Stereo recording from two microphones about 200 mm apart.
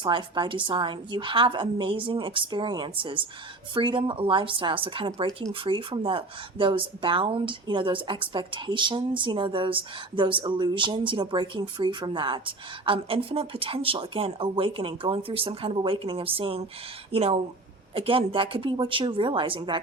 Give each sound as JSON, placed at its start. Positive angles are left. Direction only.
{"t": 0.0, "sound": "speech", "side_deg": -25}